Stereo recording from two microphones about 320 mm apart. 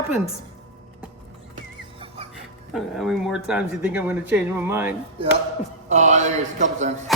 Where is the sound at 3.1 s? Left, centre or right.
Centre.